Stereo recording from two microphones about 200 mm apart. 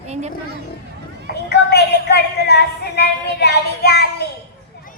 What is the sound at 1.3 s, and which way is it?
A woman's voice, 55° left (ahead or behind).